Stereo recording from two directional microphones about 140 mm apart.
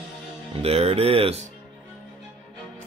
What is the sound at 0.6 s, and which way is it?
Speech, 45° right (ahead or behind).